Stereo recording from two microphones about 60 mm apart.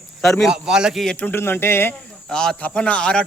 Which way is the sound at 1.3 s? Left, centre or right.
Left.